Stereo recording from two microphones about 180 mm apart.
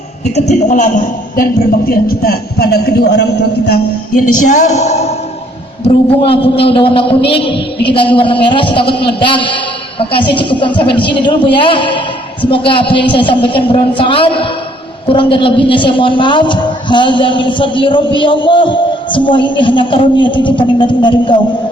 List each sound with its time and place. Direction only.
0.3 s a man's voice: 45° left (ahead or behind)
6.2 s a woman's voice: 30° left (ahead or behind)